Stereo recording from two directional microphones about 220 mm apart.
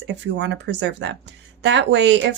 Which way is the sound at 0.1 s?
50° right (ahead or behind).